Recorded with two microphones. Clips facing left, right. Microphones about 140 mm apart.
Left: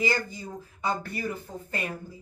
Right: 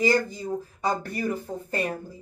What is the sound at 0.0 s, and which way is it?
Speech, 40° right (ahead or behind).